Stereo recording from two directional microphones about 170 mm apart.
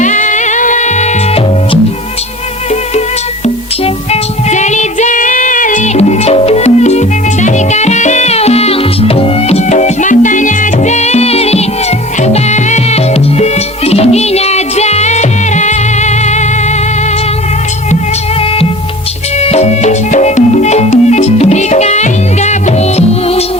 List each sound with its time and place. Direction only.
0.0 s music: 45° left (ahead or behind)
4.1 s music: 40° left (ahead or behind)
19.4 s music: 40° left (ahead or behind)